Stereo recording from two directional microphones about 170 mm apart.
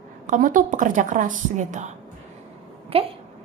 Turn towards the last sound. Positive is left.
turn(degrees=-35)  # may be behind; listen again after turning